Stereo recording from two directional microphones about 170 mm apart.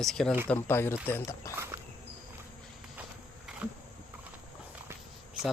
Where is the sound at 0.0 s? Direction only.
Centre (ahead or behind).